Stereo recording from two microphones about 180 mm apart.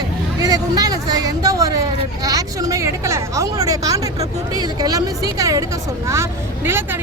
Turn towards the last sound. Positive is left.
turn(degrees=-10)  # may be behind; listen again after turning